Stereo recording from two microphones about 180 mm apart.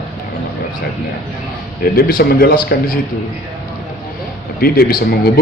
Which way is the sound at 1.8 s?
55° left (ahead or behind).